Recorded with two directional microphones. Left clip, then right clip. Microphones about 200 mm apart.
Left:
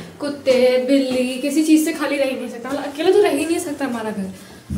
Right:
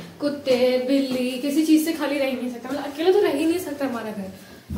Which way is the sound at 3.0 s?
Centre (ahead or behind).